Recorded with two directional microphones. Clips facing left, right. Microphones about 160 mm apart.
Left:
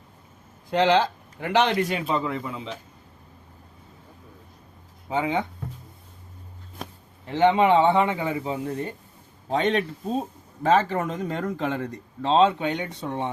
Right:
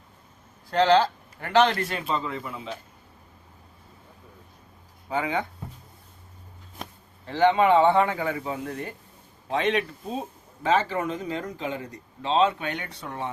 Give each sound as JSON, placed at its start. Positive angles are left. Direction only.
{"t": 0.7, "sound": "a man's voice", "side_deg": 15}
{"t": 5.0, "sound": "a man's voice", "side_deg": 20}
{"t": 7.3, "sound": "a man's voice", "side_deg": 20}
{"t": 10.6, "sound": "speech", "side_deg": 45}
{"t": 12.2, "sound": "a man's voice", "side_deg": 35}
{"t": 12.5, "sound": "a man's voice", "side_deg": 20}